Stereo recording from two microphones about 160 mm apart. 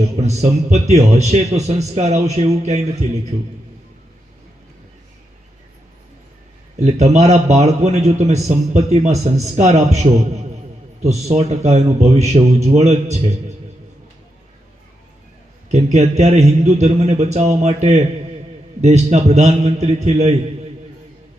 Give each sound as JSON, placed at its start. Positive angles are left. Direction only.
{"t": 0.2, "sound": "a man's voice", "side_deg": -45}
{"t": 6.7, "sound": "a man's voice", "side_deg": -45}
{"t": 15.7, "sound": "a man's voice", "side_deg": -45}